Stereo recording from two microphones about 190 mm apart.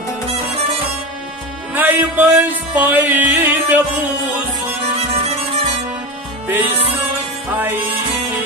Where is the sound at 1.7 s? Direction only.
10° right (ahead or behind).